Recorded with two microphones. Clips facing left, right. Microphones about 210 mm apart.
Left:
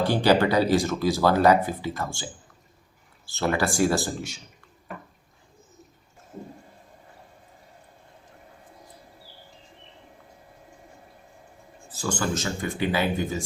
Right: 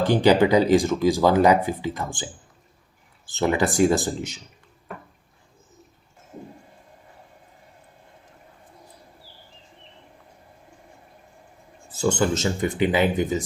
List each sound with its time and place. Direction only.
0.0 s speech: 15° right (ahead or behind)
11.9 s speech: 25° right (ahead or behind)